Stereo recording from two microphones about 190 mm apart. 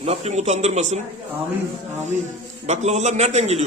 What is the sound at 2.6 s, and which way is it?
A man's voice, 35° right (ahead or behind).